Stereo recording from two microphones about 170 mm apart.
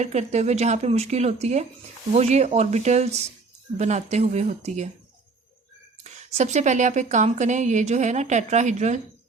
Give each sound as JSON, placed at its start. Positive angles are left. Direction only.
{"t": 0.0, "sound": "speech", "side_deg": -40}
{"t": 6.0, "sound": "a woman's voice", "side_deg": -40}